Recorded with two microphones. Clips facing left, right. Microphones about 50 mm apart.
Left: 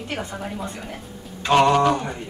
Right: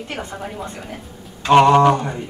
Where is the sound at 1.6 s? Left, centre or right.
Right.